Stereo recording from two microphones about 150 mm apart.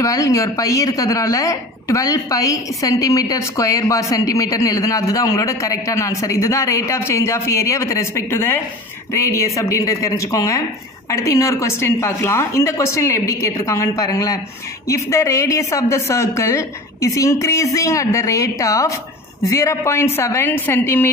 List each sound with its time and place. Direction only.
0.0 s a woman's voice: 20° left (ahead or behind)